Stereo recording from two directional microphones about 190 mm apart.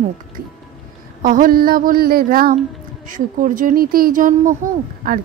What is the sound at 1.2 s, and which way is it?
Speech, 45° right (ahead or behind).